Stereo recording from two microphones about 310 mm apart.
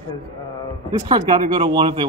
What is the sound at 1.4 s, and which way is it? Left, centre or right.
Speech, centre.